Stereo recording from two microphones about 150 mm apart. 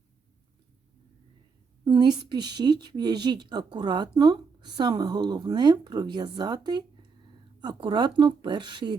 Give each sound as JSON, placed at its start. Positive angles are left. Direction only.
{"t": 1.8, "sound": "speech", "side_deg": -30}